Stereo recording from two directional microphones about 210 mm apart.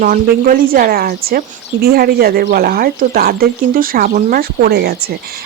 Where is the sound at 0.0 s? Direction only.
40° right (ahead or behind).